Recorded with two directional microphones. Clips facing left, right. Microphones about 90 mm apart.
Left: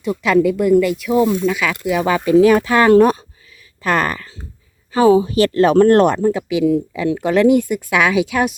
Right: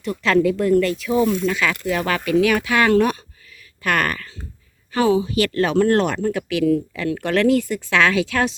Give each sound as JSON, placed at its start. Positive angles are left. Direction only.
{"t": 0.0, "sound": "speech", "side_deg": 15}
{"t": 2.3, "sound": "speech", "side_deg": 30}
{"t": 3.8, "sound": "speech", "side_deg": 25}
{"t": 5.0, "sound": "speech", "side_deg": 35}
{"t": 6.2, "sound": "speech", "side_deg": 20}